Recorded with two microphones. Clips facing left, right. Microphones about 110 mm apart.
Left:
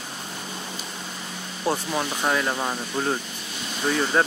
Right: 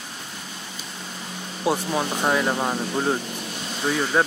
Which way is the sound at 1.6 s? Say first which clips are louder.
Right 2 dB; 10° right (ahead or behind).